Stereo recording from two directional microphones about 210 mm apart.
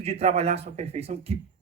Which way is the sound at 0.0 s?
30° right (ahead or behind).